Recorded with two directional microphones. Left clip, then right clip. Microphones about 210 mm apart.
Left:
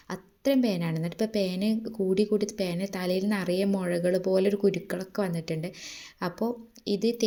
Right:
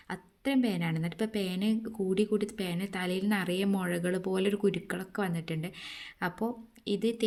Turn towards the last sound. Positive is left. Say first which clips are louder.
# left 4 dB
turn(degrees=0)  # may be behind; listen again after turning